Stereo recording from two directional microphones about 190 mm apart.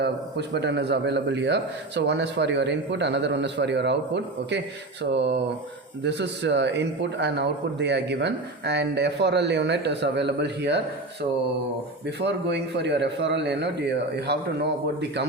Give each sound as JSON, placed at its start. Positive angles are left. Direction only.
{"t": 0.0, "sound": "speech", "side_deg": -65}
{"t": 12.0, "sound": "speech", "side_deg": -65}